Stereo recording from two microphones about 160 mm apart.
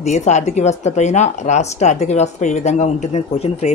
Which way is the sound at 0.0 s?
45° left (ahead or behind).